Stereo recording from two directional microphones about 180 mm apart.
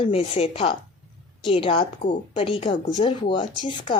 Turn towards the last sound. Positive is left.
turn(degrees=25)  # may be behind; listen again after turning